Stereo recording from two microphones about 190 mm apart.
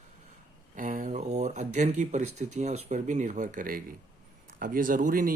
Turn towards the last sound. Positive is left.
turn(degrees=-45)  # may be behind; listen again after turning